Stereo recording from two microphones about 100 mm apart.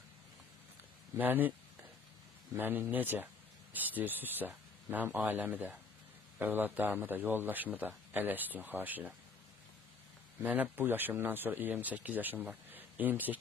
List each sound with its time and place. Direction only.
1.1 s speech: 20° right (ahead or behind)
2.5 s a man's voice: 20° right (ahead or behind)
10.4 s speech: 15° right (ahead or behind)
12.7 s a sound: 20° right (ahead or behind)